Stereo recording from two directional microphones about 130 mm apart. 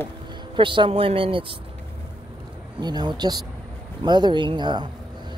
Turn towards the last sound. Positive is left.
turn(degrees=-35)  # may be behind; listen again after turning